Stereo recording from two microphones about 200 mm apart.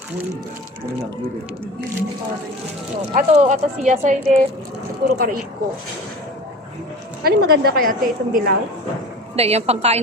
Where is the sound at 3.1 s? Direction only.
40° right (ahead or behind).